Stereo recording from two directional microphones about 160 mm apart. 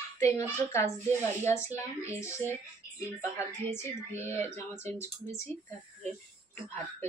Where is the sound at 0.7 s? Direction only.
15° left (ahead or behind).